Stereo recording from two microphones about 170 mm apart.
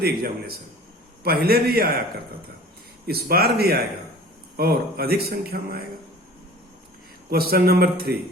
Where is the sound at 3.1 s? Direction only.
65° right (ahead or behind).